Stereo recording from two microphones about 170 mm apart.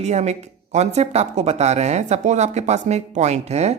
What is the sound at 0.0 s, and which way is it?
Speech, 40° right (ahead or behind).